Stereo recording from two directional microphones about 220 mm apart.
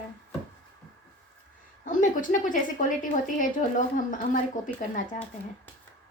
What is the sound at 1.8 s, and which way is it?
A woman's voice, 35° left (ahead or behind).